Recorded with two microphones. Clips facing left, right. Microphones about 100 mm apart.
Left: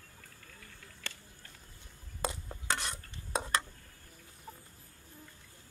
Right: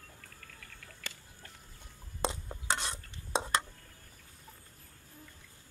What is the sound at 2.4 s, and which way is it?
Stir, 20° right (ahead or behind).